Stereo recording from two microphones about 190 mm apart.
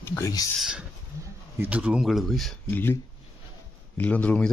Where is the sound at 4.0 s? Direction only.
10° left (ahead or behind).